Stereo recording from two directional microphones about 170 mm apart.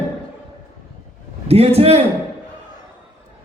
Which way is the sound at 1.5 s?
35° right (ahead or behind).